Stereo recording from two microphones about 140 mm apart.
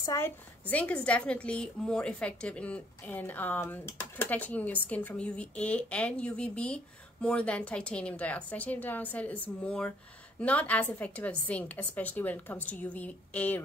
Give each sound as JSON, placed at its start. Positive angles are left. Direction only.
{"t": 0.0, "sound": "a woman's voice", "side_deg": 25}
{"t": 0.7, "sound": "a woman's voice", "side_deg": 10}